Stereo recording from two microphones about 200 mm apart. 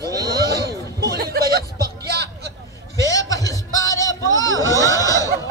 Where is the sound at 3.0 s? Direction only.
15° left (ahead or behind).